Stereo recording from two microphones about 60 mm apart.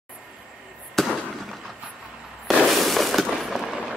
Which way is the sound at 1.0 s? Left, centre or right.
Centre.